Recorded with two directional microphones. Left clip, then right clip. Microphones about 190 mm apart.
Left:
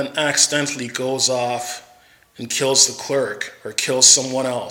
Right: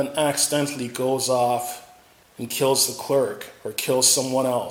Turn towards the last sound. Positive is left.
turn(degrees=5)  # may be behind; listen again after turning